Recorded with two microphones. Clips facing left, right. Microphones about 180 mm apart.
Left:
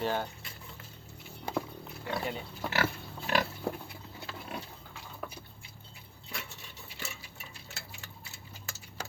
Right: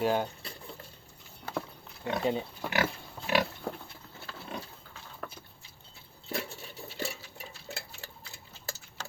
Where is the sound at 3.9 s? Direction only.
10° left (ahead or behind).